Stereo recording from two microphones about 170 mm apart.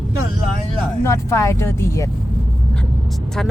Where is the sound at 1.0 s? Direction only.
15° left (ahead or behind).